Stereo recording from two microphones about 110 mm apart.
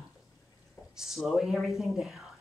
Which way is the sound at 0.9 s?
5° right (ahead or behind).